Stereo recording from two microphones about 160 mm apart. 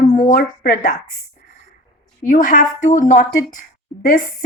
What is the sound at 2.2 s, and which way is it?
A woman's voice, 55° left (ahead or behind).